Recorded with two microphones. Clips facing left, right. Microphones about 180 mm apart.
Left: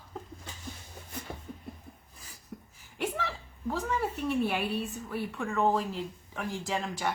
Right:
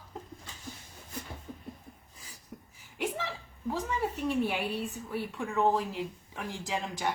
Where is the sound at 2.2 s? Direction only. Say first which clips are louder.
Left 2 dB; 15° right (ahead or behind).